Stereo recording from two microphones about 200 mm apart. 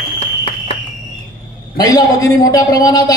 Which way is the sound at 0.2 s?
30° left (ahead or behind).